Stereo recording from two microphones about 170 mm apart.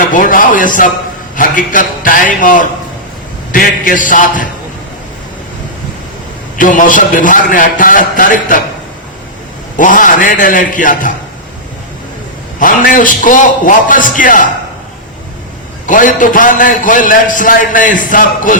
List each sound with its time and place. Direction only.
0.1 s a man's voice: 50° left (ahead or behind)
6.6 s a man's voice: 50° left (ahead or behind)
9.7 s a man's voice: 50° left (ahead or behind)
12.5 s a man's voice: 55° left (ahead or behind)
15.9 s a man's voice: 50° left (ahead or behind)